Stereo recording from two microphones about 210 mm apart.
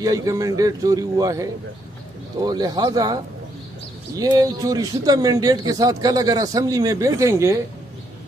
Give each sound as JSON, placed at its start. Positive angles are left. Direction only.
{"t": 0.0, "sound": "speech", "side_deg": -15}
{"t": 4.2, "sound": "speech", "side_deg": -20}